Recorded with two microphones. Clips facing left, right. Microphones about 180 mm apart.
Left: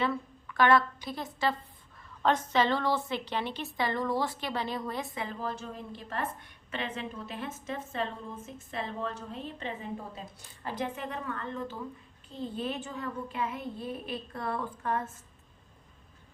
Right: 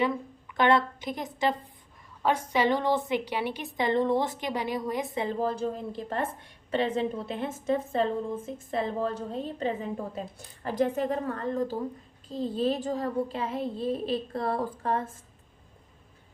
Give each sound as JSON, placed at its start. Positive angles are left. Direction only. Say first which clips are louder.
{"t": 0.0, "sound": "a woman's voice", "louder": "right 3 dB", "side_deg": -15}